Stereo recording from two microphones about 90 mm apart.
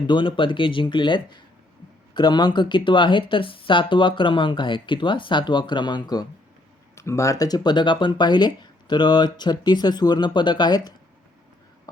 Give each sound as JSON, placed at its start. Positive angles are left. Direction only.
{"t": 0.1, "sound": "speech", "side_deg": 65}
{"t": 6.9, "sound": "speech", "side_deg": 30}